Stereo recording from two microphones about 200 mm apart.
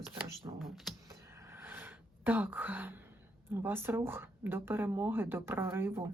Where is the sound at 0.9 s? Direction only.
Centre (ahead or behind).